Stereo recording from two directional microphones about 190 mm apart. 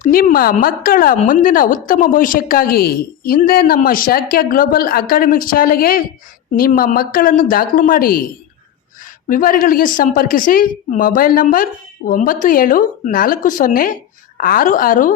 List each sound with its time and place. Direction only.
0.0 s a woman's voice: 45° left (ahead or behind)
9.3 s a woman's voice: 45° left (ahead or behind)